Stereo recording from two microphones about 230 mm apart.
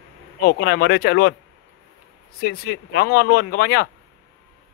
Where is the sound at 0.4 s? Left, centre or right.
Left.